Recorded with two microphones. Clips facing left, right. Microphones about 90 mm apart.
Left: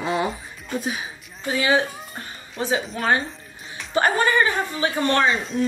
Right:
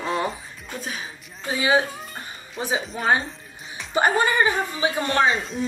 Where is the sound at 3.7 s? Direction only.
15° right (ahead or behind).